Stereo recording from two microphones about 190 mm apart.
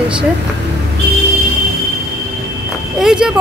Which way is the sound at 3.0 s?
5° right (ahead or behind).